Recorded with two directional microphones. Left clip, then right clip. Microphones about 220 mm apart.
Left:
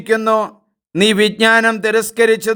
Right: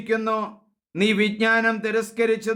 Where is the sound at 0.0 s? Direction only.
40° left (ahead or behind).